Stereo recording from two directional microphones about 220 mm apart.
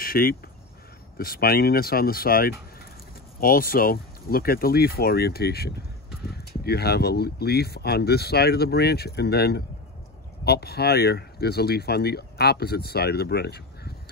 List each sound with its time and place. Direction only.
0.0 s speech: 40° left (ahead or behind)